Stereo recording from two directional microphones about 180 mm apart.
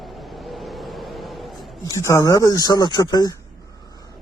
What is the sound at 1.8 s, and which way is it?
Speech, 15° left (ahead or behind).